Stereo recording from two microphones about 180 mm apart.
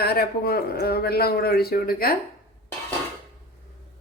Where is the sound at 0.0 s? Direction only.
60° left (ahead or behind).